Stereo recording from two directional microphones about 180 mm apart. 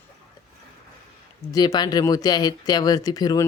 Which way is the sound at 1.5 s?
20° left (ahead or behind).